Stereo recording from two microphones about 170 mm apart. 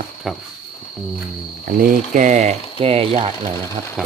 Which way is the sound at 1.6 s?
55° right (ahead or behind).